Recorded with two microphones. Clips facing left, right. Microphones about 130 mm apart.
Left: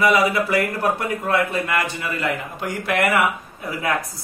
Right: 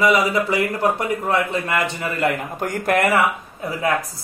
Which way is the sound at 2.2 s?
45° right (ahead or behind).